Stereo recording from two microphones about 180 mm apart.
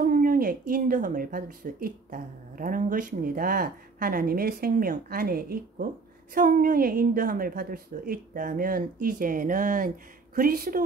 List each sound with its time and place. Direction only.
0.0 s a woman's voice: 50° right (ahead or behind)